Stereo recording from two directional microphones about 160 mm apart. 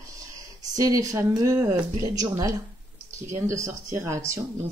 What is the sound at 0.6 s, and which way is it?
Speech, 20° right (ahead or behind).